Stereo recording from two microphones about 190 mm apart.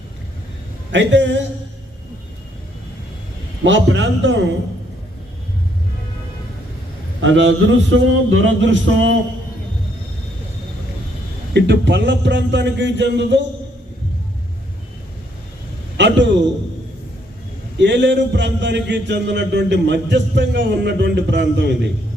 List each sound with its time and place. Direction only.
0.9 s a man's voice: 75° right (ahead or behind)
3.6 s a man's voice: 75° right (ahead or behind)
7.2 s a man's voice: 80° right
11.5 s a man's voice: 65° right (ahead or behind)
16.0 s a man's voice: 70° right (ahead or behind)
17.7 s a man's voice: 70° right (ahead or behind)